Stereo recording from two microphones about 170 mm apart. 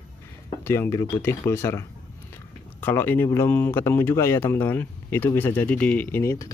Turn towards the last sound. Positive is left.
turn(degrees=15)  # may be behind; listen again after turning